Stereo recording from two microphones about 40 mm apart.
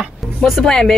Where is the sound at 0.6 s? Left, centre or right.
Centre.